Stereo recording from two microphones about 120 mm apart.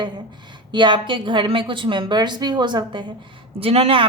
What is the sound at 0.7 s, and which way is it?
A woman's voice, 40° right (ahead or behind).